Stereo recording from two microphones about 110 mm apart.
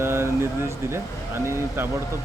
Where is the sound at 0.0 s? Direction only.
25° right (ahead or behind).